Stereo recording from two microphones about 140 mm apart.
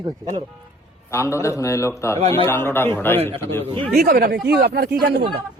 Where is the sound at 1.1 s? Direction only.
20° left (ahead or behind).